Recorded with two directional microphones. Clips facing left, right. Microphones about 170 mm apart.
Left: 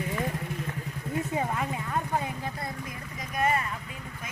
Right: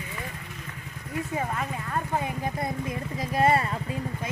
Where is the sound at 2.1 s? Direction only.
15° right (ahead or behind).